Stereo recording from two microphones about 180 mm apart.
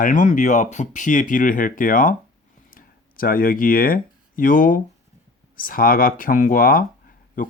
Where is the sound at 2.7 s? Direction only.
50° left (ahead or behind).